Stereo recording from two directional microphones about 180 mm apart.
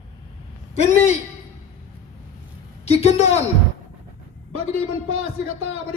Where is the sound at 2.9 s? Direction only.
35° left (ahead or behind).